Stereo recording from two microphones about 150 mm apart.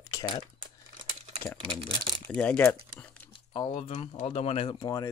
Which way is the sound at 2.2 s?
10° left (ahead or behind).